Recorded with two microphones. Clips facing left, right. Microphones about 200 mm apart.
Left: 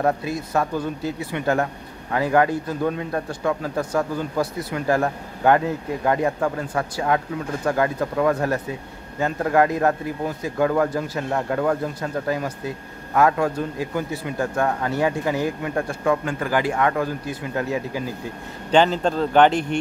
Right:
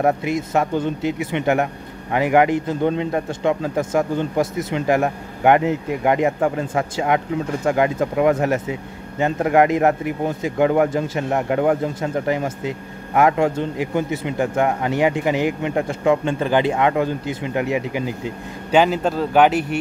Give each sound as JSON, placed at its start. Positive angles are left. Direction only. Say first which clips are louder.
{"t": 0.0, "sound": "speech", "louder": "right 3 dB", "side_deg": -20}
{"t": 18.7, "sound": "speech", "louder": "right 1 dB", "side_deg": -10}